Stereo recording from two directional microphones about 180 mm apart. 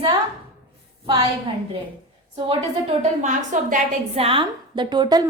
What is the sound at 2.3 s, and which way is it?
Speech, 30° right (ahead or behind).